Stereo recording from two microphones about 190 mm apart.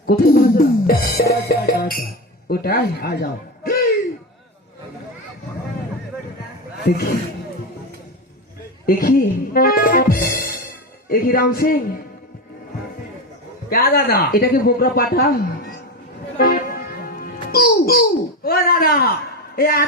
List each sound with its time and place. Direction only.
0.0 s music: 50° left (ahead or behind)
2.5 s a man's voice: 55° left (ahead or behind)
6.8 s music: 50° left (ahead or behind)
8.9 s music: 50° left (ahead or behind)
13.7 s music: 50° left (ahead or behind)
19.5 s speech: 50° left (ahead or behind)